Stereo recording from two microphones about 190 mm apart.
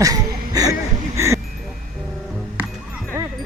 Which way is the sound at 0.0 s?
20° right (ahead or behind).